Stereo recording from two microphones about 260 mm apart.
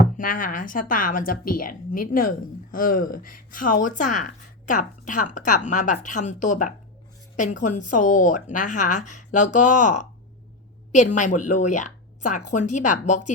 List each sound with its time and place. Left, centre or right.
0.2 s a woman's voice: left